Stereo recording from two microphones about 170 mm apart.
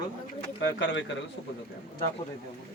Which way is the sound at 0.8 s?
90° left.